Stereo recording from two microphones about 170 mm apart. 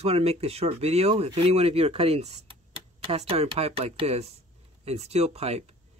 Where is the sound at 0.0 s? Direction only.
40° right (ahead or behind).